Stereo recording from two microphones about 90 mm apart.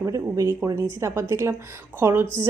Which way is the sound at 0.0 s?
35° right (ahead or behind).